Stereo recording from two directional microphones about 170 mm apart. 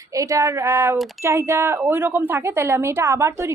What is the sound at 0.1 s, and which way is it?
A woman's voice, 20° right (ahead or behind).